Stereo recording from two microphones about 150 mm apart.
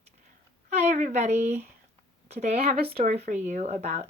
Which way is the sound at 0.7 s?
50° right (ahead or behind).